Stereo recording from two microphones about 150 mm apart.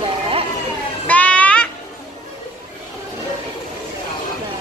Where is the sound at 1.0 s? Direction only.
10° left (ahead or behind).